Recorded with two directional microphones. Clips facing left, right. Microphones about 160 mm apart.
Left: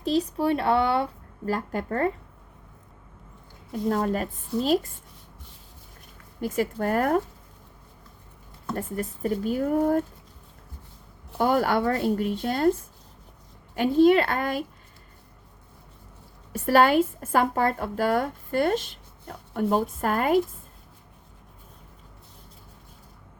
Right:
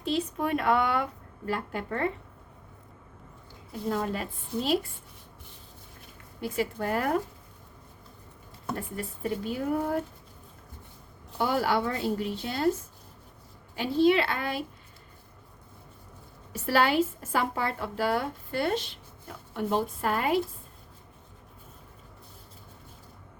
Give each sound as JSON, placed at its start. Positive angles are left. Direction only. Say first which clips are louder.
{"t": 0.0, "sound": "speech", "louder": "left 5 dB", "side_deg": 40}
{"t": 1.5, "sound": "speech", "louder": "left 4 dB", "side_deg": 40}
{"t": 3.7, "sound": "speech", "louder": "left 5 dB", "side_deg": 45}
{"t": 6.4, "sound": "speech", "louder": "left 4 dB", "side_deg": 50}
{"t": 8.7, "sound": "speech", "louder": "left 5 dB", "side_deg": 45}
{"t": 11.3, "sound": "speech", "louder": "left 4 dB", "side_deg": 50}
{"t": 13.7, "sound": "speech", "louder": "left 5 dB", "side_deg": 50}
{"t": 16.5, "sound": "speech", "louder": "left 5 dB", "side_deg": 50}